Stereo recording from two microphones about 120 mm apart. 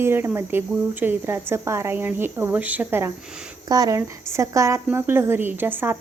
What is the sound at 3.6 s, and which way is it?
A woman's voice, 30° right (ahead or behind).